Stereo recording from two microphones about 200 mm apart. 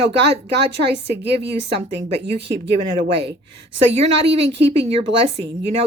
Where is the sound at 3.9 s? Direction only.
30° right (ahead or behind).